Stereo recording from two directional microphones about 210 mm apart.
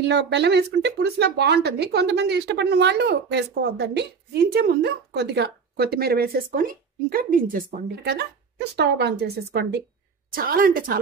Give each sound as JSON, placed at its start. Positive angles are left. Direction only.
{"t": 0.0, "sound": "speech", "side_deg": -55}